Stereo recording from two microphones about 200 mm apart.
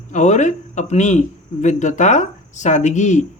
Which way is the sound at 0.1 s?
35° left (ahead or behind).